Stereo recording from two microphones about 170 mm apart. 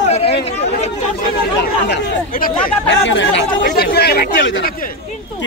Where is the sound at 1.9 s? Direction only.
55° left (ahead or behind).